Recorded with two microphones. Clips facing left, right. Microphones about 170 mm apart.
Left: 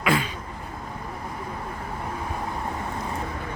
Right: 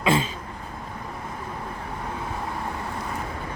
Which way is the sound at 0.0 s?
25° right (ahead or behind).